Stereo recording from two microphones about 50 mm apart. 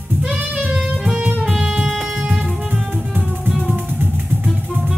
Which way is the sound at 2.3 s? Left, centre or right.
Right.